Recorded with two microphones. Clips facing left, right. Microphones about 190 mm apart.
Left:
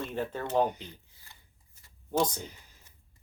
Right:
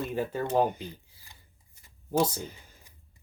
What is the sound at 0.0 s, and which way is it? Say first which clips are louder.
Speech: right 3 dB; 10° right (ahead or behind).